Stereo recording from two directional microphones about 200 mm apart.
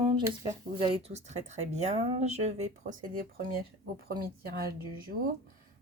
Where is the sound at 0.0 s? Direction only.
20° right (ahead or behind); by 3.6 s 45° right (ahead or behind).